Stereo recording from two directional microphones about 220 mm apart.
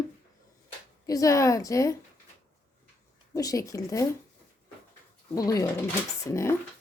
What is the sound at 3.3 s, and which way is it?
Speech, 15° left (ahead or behind).